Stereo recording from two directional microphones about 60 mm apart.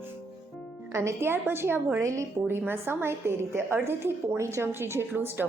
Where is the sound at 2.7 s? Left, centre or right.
Right.